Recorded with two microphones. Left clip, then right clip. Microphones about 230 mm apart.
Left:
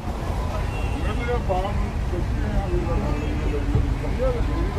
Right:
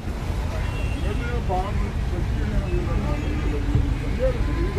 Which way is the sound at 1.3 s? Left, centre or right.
Left.